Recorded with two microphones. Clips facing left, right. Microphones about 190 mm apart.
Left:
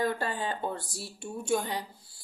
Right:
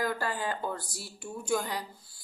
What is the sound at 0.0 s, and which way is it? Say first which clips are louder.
A woman's voice: left 1 dB; 25° left (ahead or behind).